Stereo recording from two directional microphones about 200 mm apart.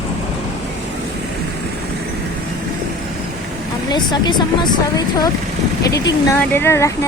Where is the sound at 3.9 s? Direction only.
20° left (ahead or behind).